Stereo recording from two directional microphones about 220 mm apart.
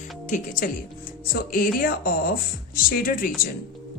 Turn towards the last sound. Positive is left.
turn(degrees=40)  # may be behind; listen again after turning